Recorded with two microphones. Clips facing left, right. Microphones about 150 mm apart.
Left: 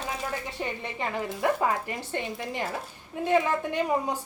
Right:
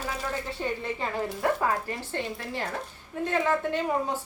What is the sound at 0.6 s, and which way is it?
A woman's voice, 15° left (ahead or behind).